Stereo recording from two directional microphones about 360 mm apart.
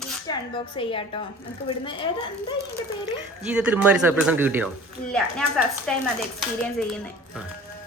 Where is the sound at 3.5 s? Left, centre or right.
Centre.